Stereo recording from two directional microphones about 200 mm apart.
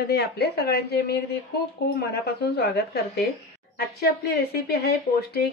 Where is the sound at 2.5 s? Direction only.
55° left (ahead or behind).